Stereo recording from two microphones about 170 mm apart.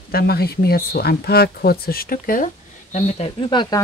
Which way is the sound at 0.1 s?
65° left (ahead or behind).